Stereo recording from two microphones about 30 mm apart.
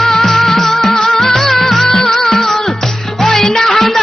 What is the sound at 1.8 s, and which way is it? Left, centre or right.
Music, centre.